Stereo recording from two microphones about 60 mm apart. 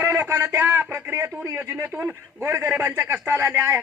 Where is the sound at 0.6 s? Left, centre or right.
Right.